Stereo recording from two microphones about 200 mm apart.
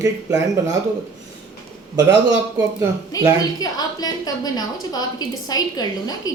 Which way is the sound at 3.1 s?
20° left (ahead or behind).